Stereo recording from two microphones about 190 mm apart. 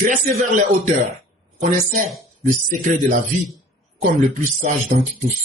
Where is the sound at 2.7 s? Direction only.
40° right (ahead or behind).